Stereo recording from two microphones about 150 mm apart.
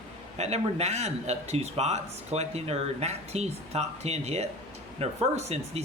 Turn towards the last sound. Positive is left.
turn(degrees=-45)  # may be behind; listen again after turning